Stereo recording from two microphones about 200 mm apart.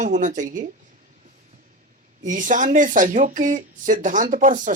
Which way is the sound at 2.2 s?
40° right (ahead or behind).